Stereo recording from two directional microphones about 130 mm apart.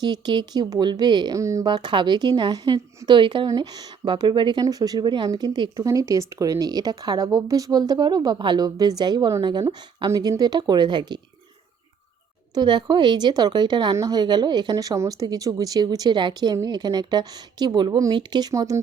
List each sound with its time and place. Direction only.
0.0 s a woman's voice: 35° right (ahead or behind)
1.4 s a woman's voice: 25° right (ahead or behind)
12.5 s a woman's voice: 35° right (ahead or behind)